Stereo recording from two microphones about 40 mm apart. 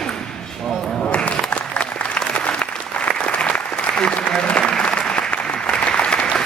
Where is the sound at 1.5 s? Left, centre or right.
Left.